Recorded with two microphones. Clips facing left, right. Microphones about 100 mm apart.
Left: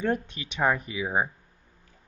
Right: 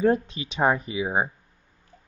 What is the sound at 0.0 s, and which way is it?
Speech, 30° right (ahead or behind).